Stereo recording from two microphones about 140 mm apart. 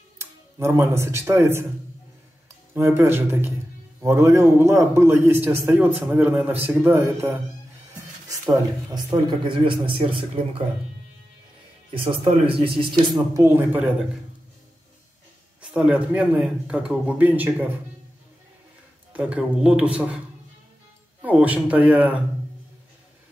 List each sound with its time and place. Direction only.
0.2 s speech: 15° right (ahead or behind)
2.7 s a man's voice: 15° right (ahead or behind)
8.9 s speech: 35° right (ahead or behind)
11.9 s speech: 40° right (ahead or behind)
13.1 s a man's voice: 20° right (ahead or behind)
15.6 s a man's voice: 5° right (ahead or behind)
19.1 s a man's voice: 10° right (ahead or behind)
21.2 s a man's voice: 10° right (ahead or behind)